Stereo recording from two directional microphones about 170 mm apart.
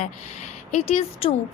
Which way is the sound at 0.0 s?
45° left (ahead or behind).